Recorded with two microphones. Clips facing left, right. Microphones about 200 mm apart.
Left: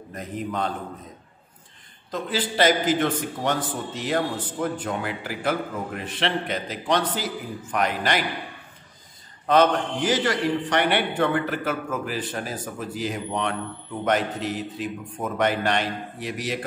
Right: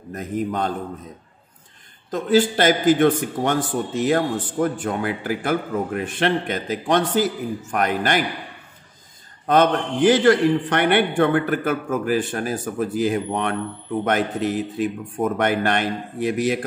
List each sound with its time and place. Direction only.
0.1 s a man's voice: 45° right (ahead or behind)
2.0 s a man's voice: 45° right (ahead or behind)
9.5 s a man's voice: 50° right (ahead or behind)